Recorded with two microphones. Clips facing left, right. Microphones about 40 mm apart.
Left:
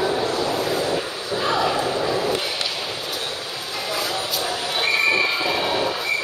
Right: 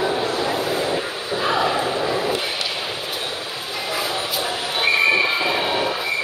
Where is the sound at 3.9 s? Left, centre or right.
Centre.